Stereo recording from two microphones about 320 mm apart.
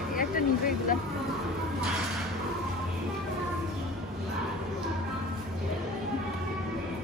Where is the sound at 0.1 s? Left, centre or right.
Left.